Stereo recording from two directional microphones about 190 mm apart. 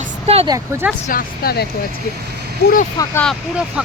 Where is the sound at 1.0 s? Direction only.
50° left (ahead or behind).